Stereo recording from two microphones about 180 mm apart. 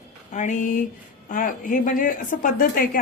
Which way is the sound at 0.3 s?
45° left (ahead or behind).